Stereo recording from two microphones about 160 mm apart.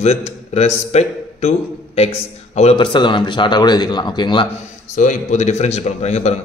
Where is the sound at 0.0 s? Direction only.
45° left (ahead or behind); by 4.5 s 30° left (ahead or behind).